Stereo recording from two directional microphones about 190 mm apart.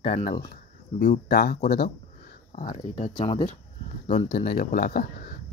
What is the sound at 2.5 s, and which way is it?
Speech, 30° left (ahead or behind).